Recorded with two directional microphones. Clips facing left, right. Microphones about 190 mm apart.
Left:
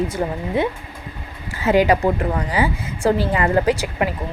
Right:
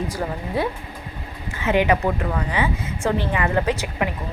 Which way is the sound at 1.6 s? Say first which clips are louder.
Left 3 dB; 35° left (ahead or behind).